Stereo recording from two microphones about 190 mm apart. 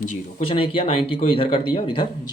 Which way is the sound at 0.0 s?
40° left (ahead or behind).